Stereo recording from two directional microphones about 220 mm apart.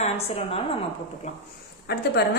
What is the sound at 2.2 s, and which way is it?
Speech, 45° left (ahead or behind).